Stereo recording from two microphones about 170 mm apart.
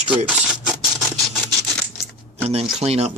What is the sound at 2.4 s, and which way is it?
Speech, 40° right (ahead or behind).